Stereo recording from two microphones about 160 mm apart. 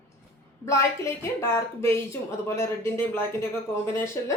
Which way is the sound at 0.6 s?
20° left (ahead or behind).